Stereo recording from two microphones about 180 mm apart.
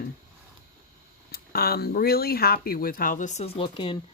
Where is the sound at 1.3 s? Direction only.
60° left (ahead or behind); by 3.9 s 30° left (ahead or behind).